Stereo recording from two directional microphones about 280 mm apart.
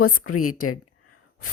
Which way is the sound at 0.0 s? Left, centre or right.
Left.